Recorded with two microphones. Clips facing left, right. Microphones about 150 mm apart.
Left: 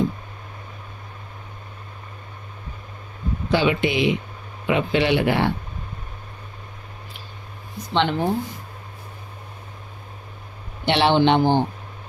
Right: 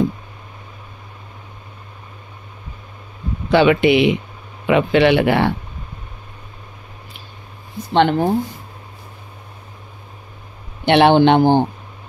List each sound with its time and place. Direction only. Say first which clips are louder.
3.5 s speech: right 8 dB; 65° right (ahead or behind)
7.9 s a man's voice: right 6 dB; 50° right (ahead or behind)
10.9 s a man's voice: right 6 dB; 55° right (ahead or behind)